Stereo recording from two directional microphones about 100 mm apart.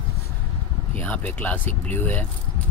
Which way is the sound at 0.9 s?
15° left (ahead or behind).